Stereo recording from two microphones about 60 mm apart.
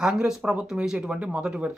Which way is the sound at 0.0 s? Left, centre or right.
Centre.